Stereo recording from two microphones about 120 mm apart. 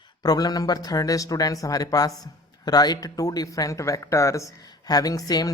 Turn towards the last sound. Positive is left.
turn(degrees=30)  # may be behind; listen again after turning